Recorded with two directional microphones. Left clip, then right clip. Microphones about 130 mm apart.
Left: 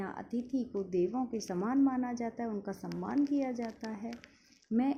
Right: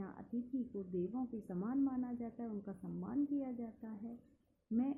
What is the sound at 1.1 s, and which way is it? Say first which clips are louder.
A woman's voice: left 9 dB; 35° left (ahead or behind).